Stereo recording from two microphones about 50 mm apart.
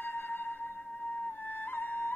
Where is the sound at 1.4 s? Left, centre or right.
Left.